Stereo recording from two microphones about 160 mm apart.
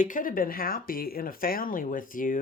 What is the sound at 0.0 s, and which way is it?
Speech, 55° left (ahead or behind).